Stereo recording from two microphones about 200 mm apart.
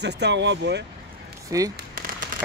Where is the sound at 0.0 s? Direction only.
60° right (ahead or behind).